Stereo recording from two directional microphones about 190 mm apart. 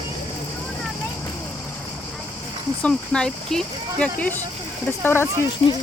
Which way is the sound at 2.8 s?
5° left (ahead or behind).